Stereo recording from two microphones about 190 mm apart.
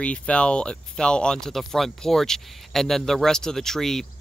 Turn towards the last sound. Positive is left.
turn(degrees=0)  # may be behind; listen again after turning